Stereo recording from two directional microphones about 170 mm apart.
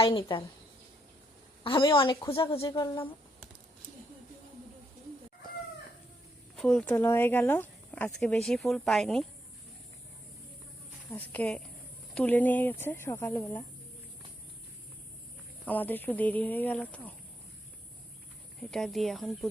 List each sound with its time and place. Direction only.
0.0 s a woman's voice: 30° left (ahead or behind)
1.6 s a woman's voice: 30° left (ahead or behind)
6.6 s speech: 5° left (ahead or behind)
11.1 s speech: 10° left (ahead or behind)
15.6 s speech: 10° left (ahead or behind)
18.6 s speech: centre (ahead or behind)